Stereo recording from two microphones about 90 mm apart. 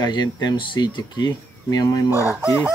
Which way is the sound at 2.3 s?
20° right (ahead or behind).